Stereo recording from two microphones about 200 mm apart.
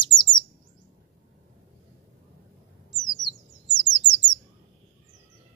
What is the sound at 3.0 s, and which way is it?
Bird, 20° left (ahead or behind).